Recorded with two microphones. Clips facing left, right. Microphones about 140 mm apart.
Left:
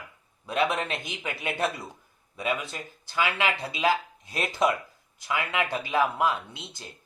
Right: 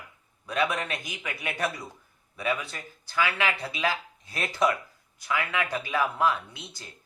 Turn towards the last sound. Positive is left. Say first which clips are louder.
# left 2 dB
turn(degrees=20)  # may be behind; listen again after turning